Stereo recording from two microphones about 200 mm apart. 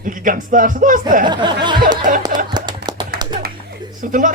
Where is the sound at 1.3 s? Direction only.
20° right (ahead or behind).